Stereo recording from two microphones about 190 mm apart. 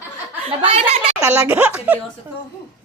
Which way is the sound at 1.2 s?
10° right (ahead or behind).